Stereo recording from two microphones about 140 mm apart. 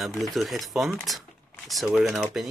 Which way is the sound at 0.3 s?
Centre (ahead or behind).